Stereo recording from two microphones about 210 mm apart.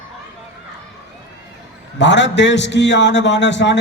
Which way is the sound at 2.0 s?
55° left (ahead or behind).